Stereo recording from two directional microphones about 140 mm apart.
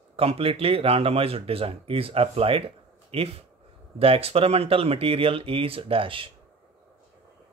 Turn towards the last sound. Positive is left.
turn(degrees=-40)  # may be behind; listen again after turning